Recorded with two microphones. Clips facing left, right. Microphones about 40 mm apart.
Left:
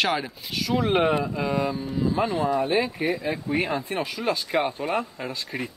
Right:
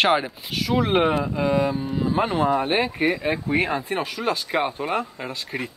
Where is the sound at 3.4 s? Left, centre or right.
Right.